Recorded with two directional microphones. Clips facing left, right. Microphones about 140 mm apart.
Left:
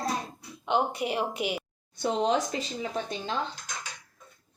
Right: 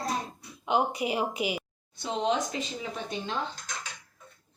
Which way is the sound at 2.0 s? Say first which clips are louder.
Left 2 dB; 40° left (ahead or behind).